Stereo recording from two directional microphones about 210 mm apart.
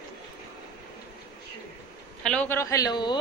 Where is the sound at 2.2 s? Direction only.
10° left (ahead or behind).